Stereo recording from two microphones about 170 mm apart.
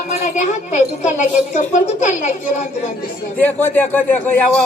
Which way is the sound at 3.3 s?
10° left (ahead or behind).